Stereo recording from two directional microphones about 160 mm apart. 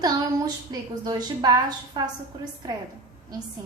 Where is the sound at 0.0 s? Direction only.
25° right (ahead or behind).